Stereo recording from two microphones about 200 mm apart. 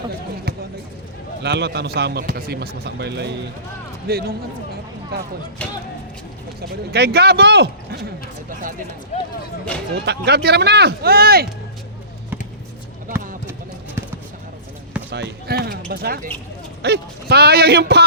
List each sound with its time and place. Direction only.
0.5 s basketball bounce: 50° right (ahead or behind)
1.4 s speech: 60° right (ahead or behind)
6.6 s speech: 55° right (ahead or behind)
9.9 s speech: 55° right (ahead or behind)
15.1 s speech: 55° right (ahead or behind)